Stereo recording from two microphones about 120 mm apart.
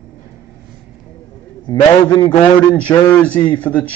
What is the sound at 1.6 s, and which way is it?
Speech, 40° left (ahead or behind).